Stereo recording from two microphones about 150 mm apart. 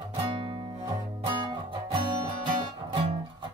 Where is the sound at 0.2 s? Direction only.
35° right (ahead or behind).